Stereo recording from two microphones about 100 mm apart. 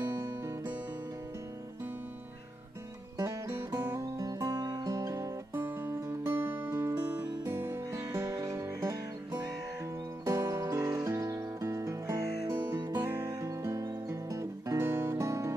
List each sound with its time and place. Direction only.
0.0 s music: 35° right (ahead or behind)
4.0 s music: 35° right (ahead or behind)